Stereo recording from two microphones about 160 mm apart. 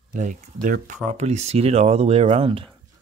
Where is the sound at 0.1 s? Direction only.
50° right (ahead or behind).